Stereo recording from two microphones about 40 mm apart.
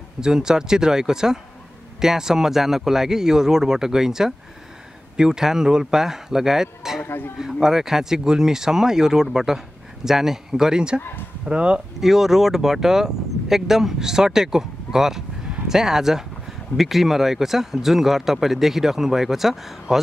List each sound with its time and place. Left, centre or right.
0.2 s speech: centre
7.0 s a man's voice: left
7.6 s speech: centre; by 11.8 s right
12.0 s speech: centre